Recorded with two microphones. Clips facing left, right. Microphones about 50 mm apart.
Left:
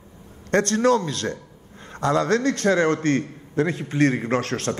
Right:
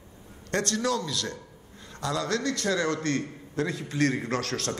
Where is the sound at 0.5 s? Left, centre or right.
Left.